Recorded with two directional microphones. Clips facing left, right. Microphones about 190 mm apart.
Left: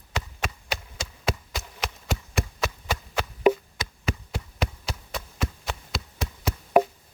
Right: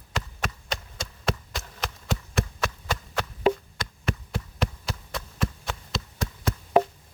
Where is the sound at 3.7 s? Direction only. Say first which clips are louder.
Even; centre (ahead or behind).